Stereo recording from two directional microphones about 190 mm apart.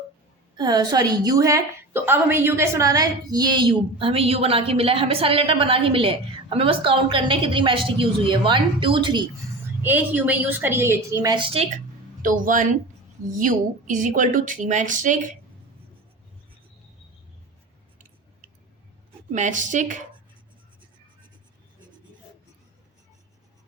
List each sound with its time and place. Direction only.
0.5 s a woman's voice: 20° right (ahead or behind)
9.8 s a woman's voice: 10° right (ahead or behind); by 11.7 s 30° right (ahead or behind)
12.2 s speech: 45° right (ahead or behind)
19.3 s a woman's voice: 40° right (ahead or behind)